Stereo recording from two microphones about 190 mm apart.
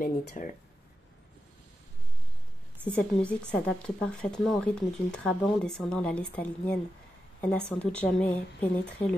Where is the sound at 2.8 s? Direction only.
5° left (ahead or behind).